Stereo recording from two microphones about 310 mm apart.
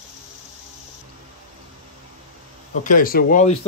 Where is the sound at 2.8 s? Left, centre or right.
Left.